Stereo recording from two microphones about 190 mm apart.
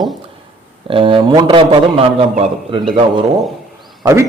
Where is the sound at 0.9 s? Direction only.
25° right (ahead or behind).